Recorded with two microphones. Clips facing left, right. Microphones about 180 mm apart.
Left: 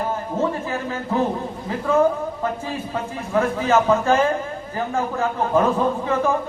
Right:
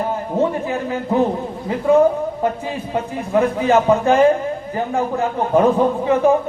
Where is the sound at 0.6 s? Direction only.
15° right (ahead or behind).